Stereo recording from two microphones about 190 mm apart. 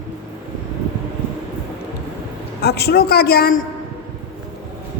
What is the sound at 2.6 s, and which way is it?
Speech, 60° left (ahead or behind).